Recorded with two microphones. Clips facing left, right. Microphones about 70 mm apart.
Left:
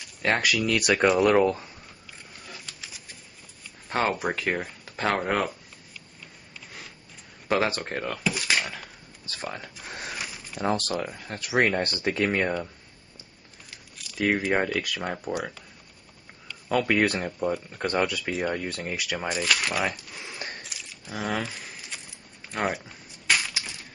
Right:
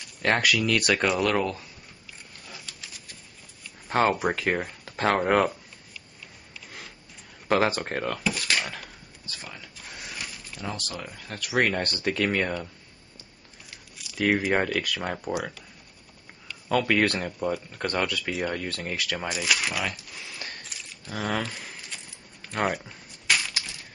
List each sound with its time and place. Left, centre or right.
0.0 s speech: centre
1.3 s speech: left
3.9 s speech: centre
7.5 s speech: centre
8.4 s speech: centre
9.3 s a sound: left
10.6 s speech: left
11.1 s speech: left
13.9 s speech: centre
16.6 s speech: centre
20.2 s a sound: left
20.6 s a sound: centre